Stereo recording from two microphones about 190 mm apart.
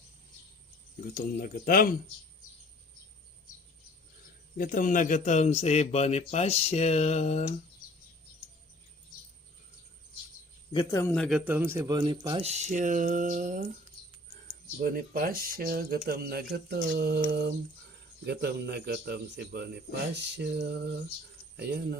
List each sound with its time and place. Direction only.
1.1 s speech: 50° left (ahead or behind)
4.5 s a man's voice: 45° left (ahead or behind)
10.7 s a man's voice: 20° left (ahead or behind)
11.3 s a man's voice: 5° right (ahead or behind); by 21.9 s 55° right (ahead or behind)